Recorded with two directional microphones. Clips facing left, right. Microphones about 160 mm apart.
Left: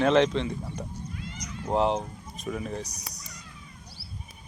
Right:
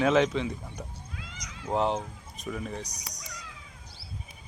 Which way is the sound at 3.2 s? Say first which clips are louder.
Right 1 dB; 90° right.